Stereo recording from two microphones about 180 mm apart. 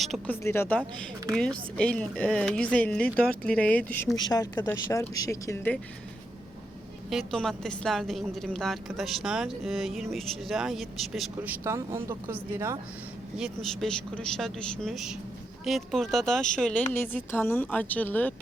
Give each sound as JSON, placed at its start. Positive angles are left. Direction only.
{"t": 0.0, "sound": "speech", "side_deg": 0}
{"t": 0.4, "sound": "a woman's voice", "side_deg": 15}
{"t": 7.1, "sound": "speech", "side_deg": 0}
{"t": 13.3, "sound": "a woman's voice", "side_deg": 0}